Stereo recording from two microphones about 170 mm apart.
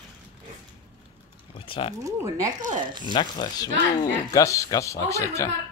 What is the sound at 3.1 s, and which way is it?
Speech, 25° left (ahead or behind).